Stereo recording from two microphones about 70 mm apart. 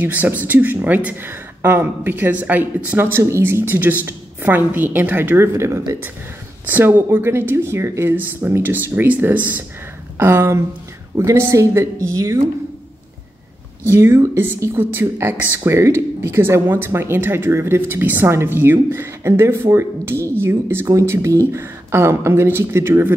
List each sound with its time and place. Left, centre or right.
0.0 s speech: right
5.5 s speech: right
6.6 s speech: right
8.1 s speech: right
10.1 s speech: right
13.9 s speech: right